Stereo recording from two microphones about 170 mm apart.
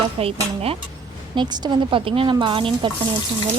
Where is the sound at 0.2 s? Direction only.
35° right (ahead or behind).